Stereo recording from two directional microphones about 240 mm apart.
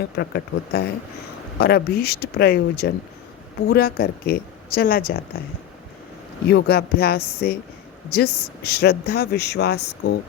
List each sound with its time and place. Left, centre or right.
0.2 s speech: left
6.5 s speech: left